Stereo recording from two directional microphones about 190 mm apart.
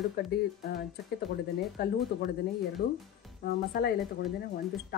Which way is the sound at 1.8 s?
55° left (ahead or behind).